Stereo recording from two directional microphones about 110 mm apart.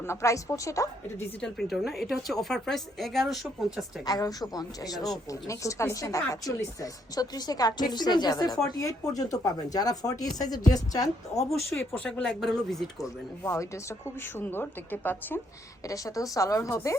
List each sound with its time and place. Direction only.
0.1 s a woman's voice: 25° left (ahead or behind)
1.4 s a woman's voice: 5° left (ahead or behind)
4.0 s a woman's voice: 35° left (ahead or behind)
11.8 s a woman's voice: 10° left (ahead or behind)
13.0 s a woman's voice: 25° left (ahead or behind)
15.9 s a woman's voice: 30° left (ahead or behind)